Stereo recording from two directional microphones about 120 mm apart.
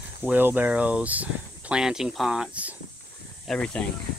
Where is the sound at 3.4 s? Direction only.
5° left (ahead or behind).